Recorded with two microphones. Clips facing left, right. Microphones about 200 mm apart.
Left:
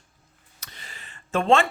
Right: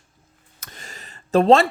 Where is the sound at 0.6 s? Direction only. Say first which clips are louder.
Right 5 dB; 45° right (ahead or behind).